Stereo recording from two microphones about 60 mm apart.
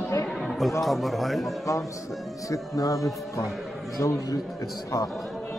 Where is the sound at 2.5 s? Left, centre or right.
Left.